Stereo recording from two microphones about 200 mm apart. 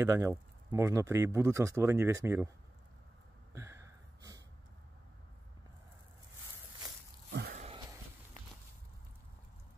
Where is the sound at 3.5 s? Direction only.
15° right (ahead or behind).